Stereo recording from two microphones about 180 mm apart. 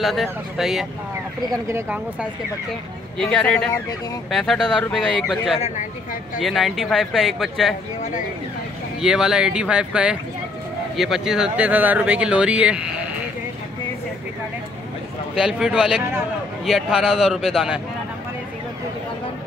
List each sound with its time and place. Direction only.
0.0 s speech: centre (ahead or behind)
1.5 s speech: 15° right (ahead or behind)
3.2 s speech: 5° left (ahead or behind)
9.0 s speech: 5° right (ahead or behind)
15.3 s speech: 5° right (ahead or behind)